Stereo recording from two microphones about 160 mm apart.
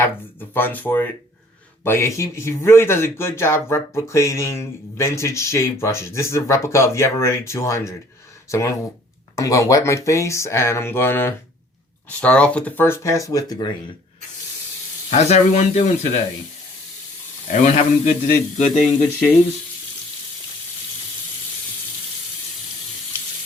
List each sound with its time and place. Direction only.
0.5 s speech: 10° left (ahead or behind)
15.1 s speech: 45° left (ahead or behind)
17.5 s speech: 50° left (ahead or behind)